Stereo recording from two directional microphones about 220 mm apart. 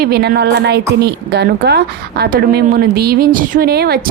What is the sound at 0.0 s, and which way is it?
A woman's voice, 45° right (ahead or behind).